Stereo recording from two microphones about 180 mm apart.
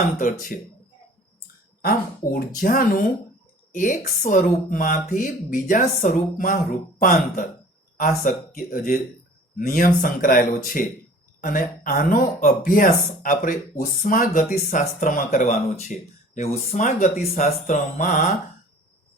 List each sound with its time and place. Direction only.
0.2 s speech: 45° left (ahead or behind)
1.8 s speech: 55° left (ahead or behind)